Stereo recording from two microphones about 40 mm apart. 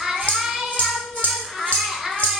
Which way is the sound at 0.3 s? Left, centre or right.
Centre.